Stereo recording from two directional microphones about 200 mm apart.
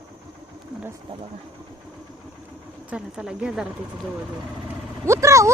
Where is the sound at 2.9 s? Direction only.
5° right (ahead or behind).